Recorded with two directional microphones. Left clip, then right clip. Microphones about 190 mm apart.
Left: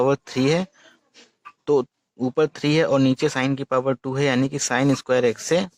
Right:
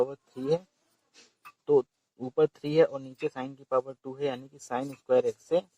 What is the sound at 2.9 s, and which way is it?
Speech, 45° left (ahead or behind).